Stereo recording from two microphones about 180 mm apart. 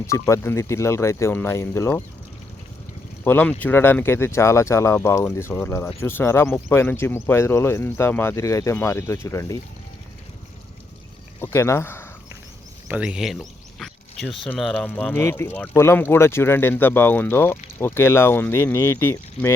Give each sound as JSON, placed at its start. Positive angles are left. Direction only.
{"t": 0.1, "sound": "speech", "side_deg": 15}
{"t": 3.2, "sound": "speech", "side_deg": 10}
{"t": 11.3, "sound": "speech", "side_deg": 15}
{"t": 12.9, "sound": "speech", "side_deg": -5}